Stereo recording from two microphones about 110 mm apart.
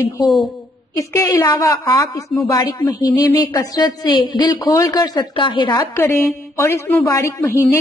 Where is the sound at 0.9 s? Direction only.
25° left (ahead or behind); by 5.8 s 50° left (ahead or behind).